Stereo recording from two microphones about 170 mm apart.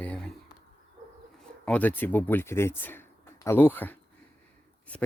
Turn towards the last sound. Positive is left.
turn(degrees=10)  # may be behind; listen again after turning